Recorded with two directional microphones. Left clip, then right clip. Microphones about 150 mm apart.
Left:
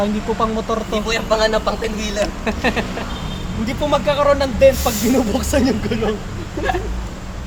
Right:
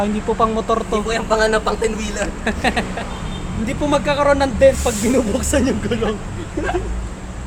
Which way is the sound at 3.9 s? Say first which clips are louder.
Even; 45° right (ahead or behind).